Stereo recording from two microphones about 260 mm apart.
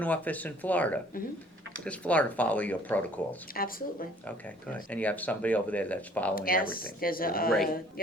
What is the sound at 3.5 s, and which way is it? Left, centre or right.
Speech, left.